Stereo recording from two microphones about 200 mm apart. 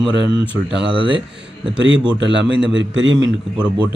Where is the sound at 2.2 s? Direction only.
65° right (ahead or behind).